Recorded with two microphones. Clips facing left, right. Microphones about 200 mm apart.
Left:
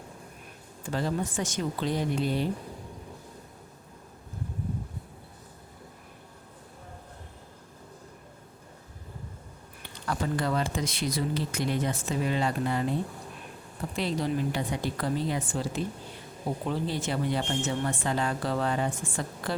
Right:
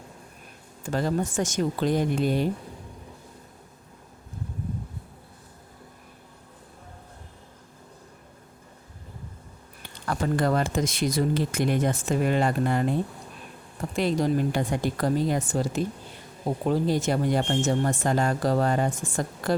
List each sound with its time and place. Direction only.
0.9 s speech: 45° right (ahead or behind)
10.1 s speech: 50° right (ahead or behind)
13.9 s speech: 50° right (ahead or behind)